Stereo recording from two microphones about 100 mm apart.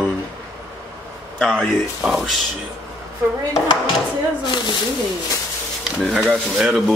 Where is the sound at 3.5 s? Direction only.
45° left (ahead or behind).